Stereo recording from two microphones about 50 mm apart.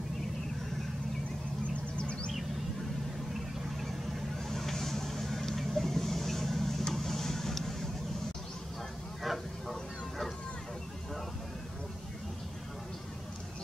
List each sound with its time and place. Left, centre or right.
2.0 s a sound: left
4.5 s vehicle: centre
9.2 s vehicle: centre